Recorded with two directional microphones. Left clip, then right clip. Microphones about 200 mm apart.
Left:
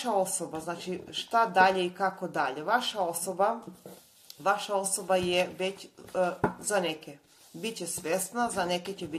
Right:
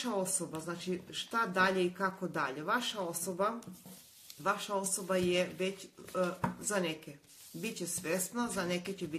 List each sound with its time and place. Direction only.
0.0 s a woman's voice: 25° right (ahead or behind)